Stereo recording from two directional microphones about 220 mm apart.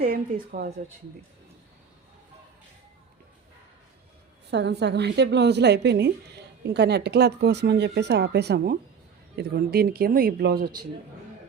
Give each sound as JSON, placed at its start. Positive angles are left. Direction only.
{"t": 0.0, "sound": "a woman's voice", "side_deg": -40}
{"t": 4.5, "sound": "a woman's voice", "side_deg": -50}